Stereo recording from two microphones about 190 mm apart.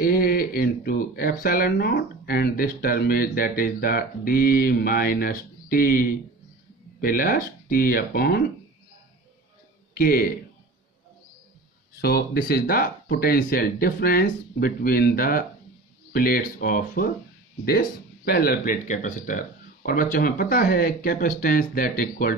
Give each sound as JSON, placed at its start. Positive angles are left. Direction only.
{"t": 0.0, "sound": "speech", "side_deg": 50}
{"t": 9.9, "sound": "speech", "side_deg": 50}
{"t": 12.0, "sound": "speech", "side_deg": 55}